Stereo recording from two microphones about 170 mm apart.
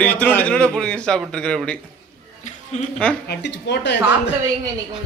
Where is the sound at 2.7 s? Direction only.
45° left (ahead or behind).